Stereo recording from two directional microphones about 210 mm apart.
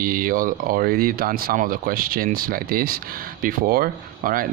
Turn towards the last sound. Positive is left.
turn(degrees=-45)  # may be behind; listen again after turning